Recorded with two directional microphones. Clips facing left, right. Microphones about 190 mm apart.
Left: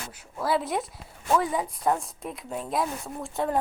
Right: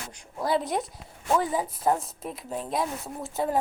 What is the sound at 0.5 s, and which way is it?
Speech, centre (ahead or behind).